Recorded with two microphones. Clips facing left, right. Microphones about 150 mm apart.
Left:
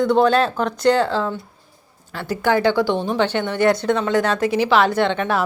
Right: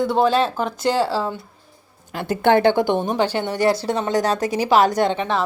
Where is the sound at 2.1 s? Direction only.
20° right (ahead or behind).